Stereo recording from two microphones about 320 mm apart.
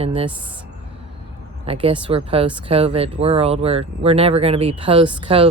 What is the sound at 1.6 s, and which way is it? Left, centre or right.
Speech, centre.